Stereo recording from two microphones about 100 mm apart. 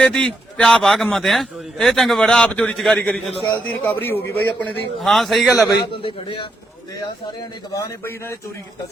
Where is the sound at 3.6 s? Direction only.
20° left (ahead or behind).